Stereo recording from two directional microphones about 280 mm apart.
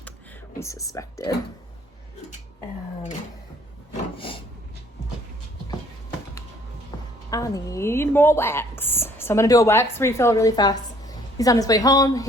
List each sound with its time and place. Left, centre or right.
0.6 s speech: centre
4.2 s a sound: centre
6.9 s music: centre
7.3 s speech: centre